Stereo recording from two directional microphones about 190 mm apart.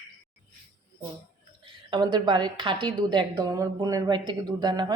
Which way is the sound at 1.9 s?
25° right (ahead or behind).